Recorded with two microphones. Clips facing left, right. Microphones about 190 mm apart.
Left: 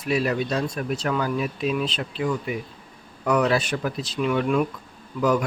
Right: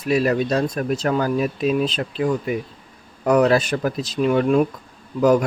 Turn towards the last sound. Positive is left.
turn(degrees=-40)  # may be behind; listen again after turning